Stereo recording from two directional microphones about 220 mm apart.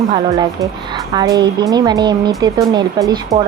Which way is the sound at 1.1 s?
20° right (ahead or behind).